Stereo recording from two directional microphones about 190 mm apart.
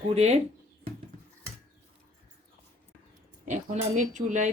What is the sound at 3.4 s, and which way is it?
Speech, 40° right (ahead or behind).